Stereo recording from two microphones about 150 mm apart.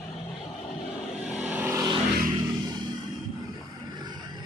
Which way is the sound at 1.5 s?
10° right (ahead or behind).